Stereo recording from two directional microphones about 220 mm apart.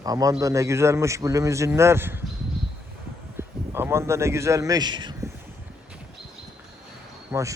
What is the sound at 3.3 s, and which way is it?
A man's voice, 10° right (ahead or behind).